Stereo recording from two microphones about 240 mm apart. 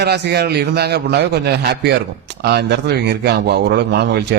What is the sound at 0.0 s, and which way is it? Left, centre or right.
Speech, right.